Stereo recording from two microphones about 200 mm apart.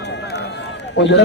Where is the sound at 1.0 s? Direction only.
65° left (ahead or behind).